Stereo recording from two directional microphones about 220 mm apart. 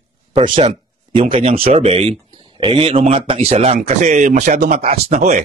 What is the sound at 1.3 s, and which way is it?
Speech, 25° right (ahead or behind).